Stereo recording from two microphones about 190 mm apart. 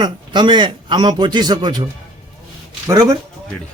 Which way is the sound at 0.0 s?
25° right (ahead or behind).